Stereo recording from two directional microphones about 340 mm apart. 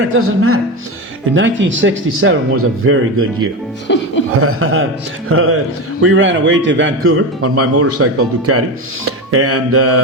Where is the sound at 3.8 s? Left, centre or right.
Left.